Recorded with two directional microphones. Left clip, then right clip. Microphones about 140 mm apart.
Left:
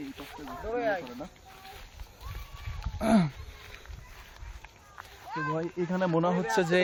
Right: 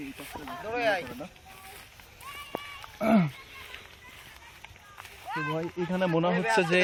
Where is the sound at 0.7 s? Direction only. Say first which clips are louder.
Right 2 dB; 90° left.